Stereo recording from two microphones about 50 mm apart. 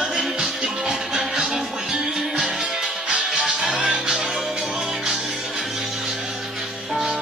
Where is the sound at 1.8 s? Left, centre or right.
Centre.